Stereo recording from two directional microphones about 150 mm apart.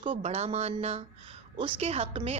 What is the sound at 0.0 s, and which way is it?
A woman's voice, 40° right (ahead or behind).